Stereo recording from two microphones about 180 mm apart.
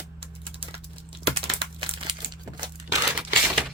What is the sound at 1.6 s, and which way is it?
Crumpling, 30° right (ahead or behind).